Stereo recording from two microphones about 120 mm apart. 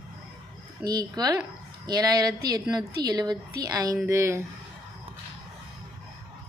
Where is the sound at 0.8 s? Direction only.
35° right (ahead or behind).